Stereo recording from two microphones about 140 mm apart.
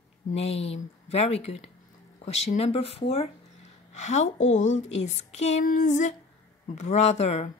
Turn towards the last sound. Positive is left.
turn(degrees=50)  # may be behind; listen again after turning